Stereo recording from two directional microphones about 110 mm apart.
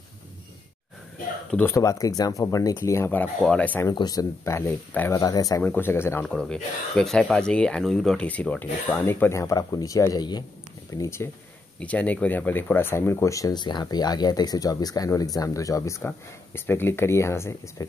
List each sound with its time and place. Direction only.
1.6 s speech: 25° left (ahead or behind)
2.8 s speech: 20° left (ahead or behind)
3.9 s speech: 35° left (ahead or behind)
5.6 s speech: 20° left (ahead or behind)
6.2 s speech: 5° left (ahead or behind); by 11.2 s 25° left (ahead or behind)
11.8 s speech: 15° left (ahead or behind)